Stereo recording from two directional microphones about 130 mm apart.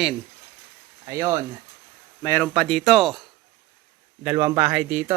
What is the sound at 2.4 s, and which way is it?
Speech, 5° left (ahead or behind).